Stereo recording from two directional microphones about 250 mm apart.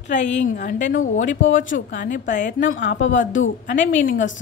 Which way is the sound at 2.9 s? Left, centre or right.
Left.